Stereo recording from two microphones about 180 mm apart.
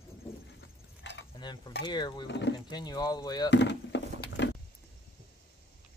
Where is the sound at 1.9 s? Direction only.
25° left (ahead or behind).